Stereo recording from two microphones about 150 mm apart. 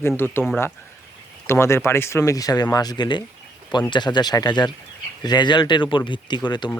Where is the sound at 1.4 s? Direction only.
15° left (ahead or behind).